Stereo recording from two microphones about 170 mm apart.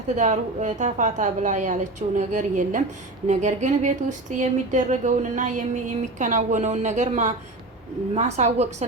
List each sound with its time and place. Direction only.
0.2 s a woman's voice: 45° right (ahead or behind)